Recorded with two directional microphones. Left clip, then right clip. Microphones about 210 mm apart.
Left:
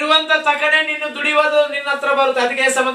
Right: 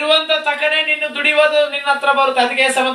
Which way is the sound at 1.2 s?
25° right (ahead or behind).